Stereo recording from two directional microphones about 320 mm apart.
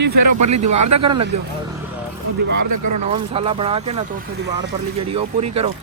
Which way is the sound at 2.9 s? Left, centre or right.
Centre.